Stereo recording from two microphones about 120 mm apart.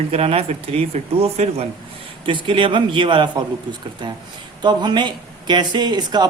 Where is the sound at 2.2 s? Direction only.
45° right (ahead or behind).